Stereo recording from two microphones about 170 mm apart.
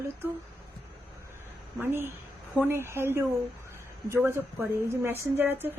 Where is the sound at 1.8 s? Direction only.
15° right (ahead or behind).